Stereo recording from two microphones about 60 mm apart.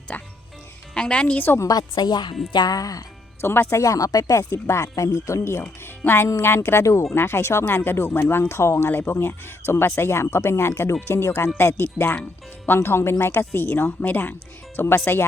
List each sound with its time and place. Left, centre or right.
0.1 s speech: left
0.9 s speech: centre
2.0 s a woman's voice: left
3.4 s speech: left
4.6 s speech: left
8.9 s a woman's voice: left